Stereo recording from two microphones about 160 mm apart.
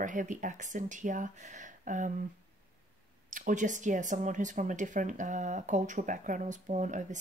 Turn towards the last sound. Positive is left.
turn(degrees=-50)  # may be behind; listen again after turning